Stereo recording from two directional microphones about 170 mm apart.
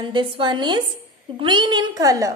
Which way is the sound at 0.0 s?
30° right (ahead or behind).